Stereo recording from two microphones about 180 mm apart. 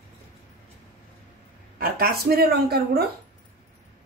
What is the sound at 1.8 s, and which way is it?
A woman's voice, 55° right (ahead or behind).